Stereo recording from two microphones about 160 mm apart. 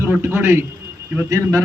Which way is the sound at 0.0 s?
15° right (ahead or behind).